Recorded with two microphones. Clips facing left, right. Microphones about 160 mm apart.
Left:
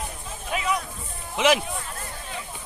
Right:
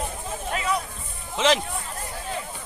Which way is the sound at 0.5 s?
10° left (ahead or behind).